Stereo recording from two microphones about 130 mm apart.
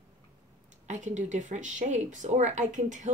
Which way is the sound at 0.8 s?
70° right (ahead or behind).